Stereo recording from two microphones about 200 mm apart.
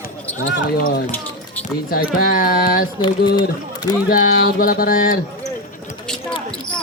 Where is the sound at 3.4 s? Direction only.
20° left (ahead or behind).